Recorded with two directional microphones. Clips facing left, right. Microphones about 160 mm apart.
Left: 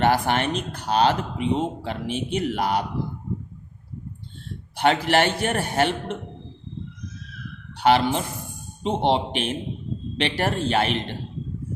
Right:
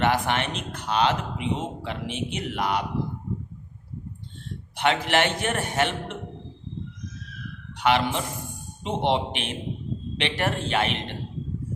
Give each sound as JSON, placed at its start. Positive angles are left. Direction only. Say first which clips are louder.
{"t": 0.0, "sound": "speech", "louder": "left 3 dB", "side_deg": 35}
{"t": 4.8, "sound": "speech", "louder": "left 3 dB", "side_deg": 35}
{"t": 7.8, "sound": "speech", "louder": "left 4 dB", "side_deg": 35}